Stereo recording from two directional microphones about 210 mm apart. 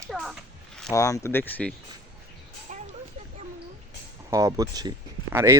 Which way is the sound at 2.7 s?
35° right (ahead or behind).